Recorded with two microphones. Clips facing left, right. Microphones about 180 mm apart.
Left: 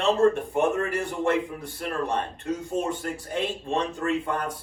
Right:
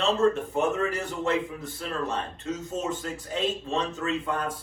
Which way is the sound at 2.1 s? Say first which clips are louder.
Left 3 dB; 60° left (ahead or behind).